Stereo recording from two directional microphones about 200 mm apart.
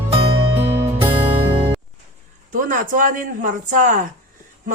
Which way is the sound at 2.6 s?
40° right (ahead or behind).